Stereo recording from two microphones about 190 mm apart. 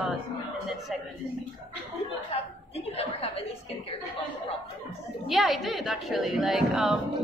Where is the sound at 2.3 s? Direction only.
30° left (ahead or behind).